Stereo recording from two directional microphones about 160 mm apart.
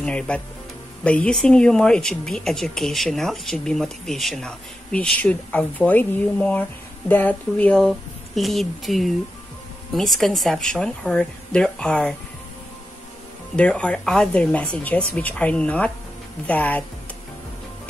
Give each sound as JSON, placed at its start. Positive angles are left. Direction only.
{"t": 0.0, "sound": "speech", "side_deg": 5}
{"t": 13.6, "sound": "speech", "side_deg": 5}